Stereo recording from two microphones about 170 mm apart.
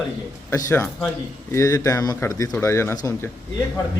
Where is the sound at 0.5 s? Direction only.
15° left (ahead or behind).